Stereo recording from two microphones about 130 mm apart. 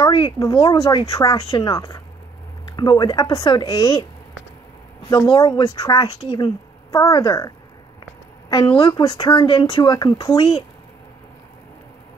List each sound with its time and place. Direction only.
0.0 s speech: 35° left (ahead or behind)
5.1 s a woman's voice: 30° left (ahead or behind)
8.7 s speech: 30° left (ahead or behind)
10.3 s speech: 50° left (ahead or behind)